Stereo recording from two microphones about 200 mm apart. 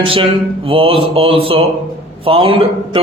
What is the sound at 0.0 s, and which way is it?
A man's voice, 25° right (ahead or behind).